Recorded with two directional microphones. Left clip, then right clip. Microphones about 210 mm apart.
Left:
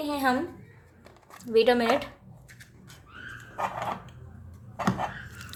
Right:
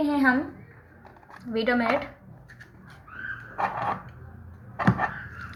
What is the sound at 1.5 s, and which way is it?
Speech, 55° left (ahead or behind).